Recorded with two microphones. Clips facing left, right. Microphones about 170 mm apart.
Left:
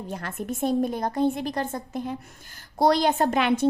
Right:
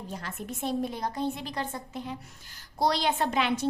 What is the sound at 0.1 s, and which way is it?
A woman's voice, 55° left (ahead or behind).